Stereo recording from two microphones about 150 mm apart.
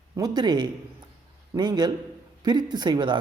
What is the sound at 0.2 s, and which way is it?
Speech, 30° right (ahead or behind).